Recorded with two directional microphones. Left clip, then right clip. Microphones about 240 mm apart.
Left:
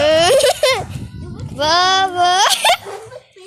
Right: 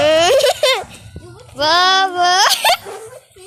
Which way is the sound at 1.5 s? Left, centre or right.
Centre.